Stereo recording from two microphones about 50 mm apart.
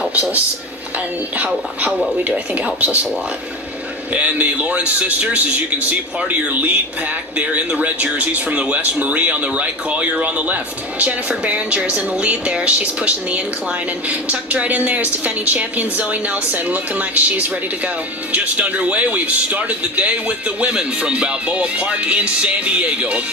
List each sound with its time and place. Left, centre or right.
0.0 s a sound: right
0.9 s speech: right
4.1 s speech: right